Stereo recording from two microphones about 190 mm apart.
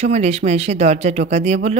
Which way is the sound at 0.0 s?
35° right (ahead or behind).